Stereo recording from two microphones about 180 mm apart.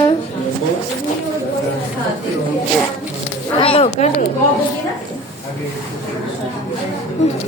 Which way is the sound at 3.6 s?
35° left (ahead or behind).